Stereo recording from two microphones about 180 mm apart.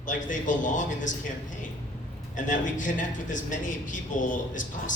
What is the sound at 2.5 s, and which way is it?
A man's voice, 45° left (ahead or behind).